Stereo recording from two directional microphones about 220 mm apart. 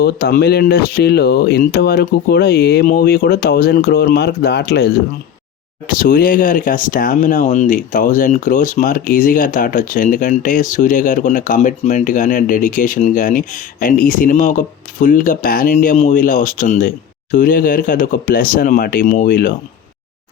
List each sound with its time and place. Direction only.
0.0 s speech: 45° left (ahead or behind)
5.9 s speech: 40° left (ahead or behind)